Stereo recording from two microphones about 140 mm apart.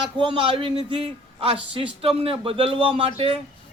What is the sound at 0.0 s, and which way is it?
Speech, 35° right (ahead or behind).